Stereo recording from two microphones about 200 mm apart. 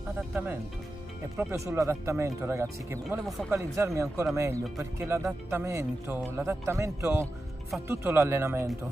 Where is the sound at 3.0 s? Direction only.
Centre (ahead or behind).